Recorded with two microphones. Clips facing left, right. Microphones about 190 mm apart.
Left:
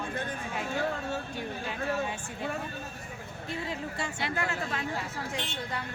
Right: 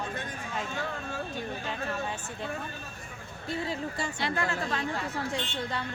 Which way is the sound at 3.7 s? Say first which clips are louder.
Right 2 dB; 35° right (ahead or behind).